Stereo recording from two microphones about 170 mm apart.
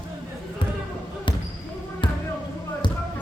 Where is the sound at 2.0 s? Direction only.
30° left (ahead or behind).